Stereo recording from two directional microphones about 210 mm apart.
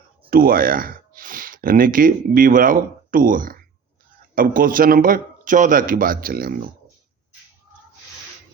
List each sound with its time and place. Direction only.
0.3 s a man's voice: 45° right (ahead or behind)